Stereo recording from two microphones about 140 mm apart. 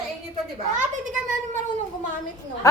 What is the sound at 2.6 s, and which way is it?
Speech, 20° left (ahead or behind).